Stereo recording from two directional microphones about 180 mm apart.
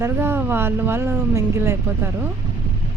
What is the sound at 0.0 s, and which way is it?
Speech, 15° right (ahead or behind).